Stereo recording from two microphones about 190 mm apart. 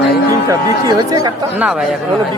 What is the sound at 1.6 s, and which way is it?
Speech, centre (ahead or behind).